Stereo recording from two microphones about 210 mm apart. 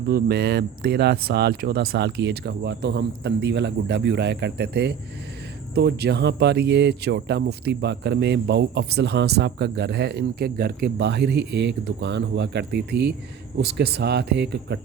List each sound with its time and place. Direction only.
0.1 s speech: 50° right (ahead or behind)